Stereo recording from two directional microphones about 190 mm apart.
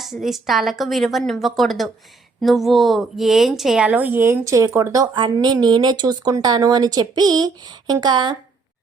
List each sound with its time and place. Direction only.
0.0 s a woman's voice: centre (ahead or behind); by 8.4 s 25° right (ahead or behind)